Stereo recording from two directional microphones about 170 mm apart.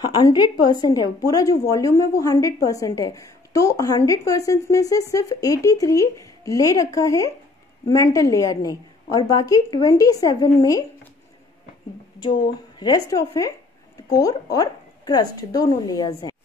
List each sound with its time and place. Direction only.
0.2 s a woman's voice: 25° left (ahead or behind)
12.2 s a woman's voice: 25° left (ahead or behind)